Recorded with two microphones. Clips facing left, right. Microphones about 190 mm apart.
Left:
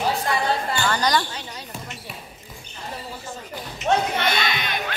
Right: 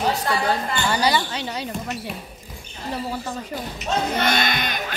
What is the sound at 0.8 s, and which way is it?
Speech, 10° right (ahead or behind).